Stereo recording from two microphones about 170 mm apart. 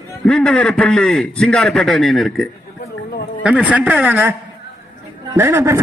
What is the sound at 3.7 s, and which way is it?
Speech, 10° right (ahead or behind).